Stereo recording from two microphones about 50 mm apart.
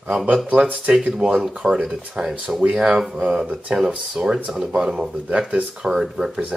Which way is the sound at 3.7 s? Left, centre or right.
Right.